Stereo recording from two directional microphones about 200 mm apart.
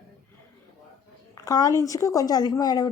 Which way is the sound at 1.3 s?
15° left (ahead or behind).